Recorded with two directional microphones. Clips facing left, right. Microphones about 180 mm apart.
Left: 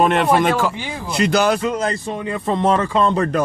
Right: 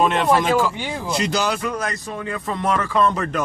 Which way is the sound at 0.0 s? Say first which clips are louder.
Left 3 dB; 60° left (ahead or behind).